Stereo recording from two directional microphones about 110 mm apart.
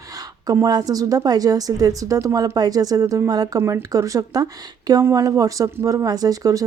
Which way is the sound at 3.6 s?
25° right (ahead or behind).